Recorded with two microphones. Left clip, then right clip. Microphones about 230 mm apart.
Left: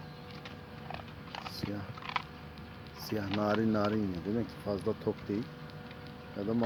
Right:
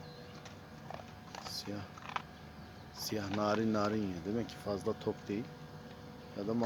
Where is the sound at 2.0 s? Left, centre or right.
Left.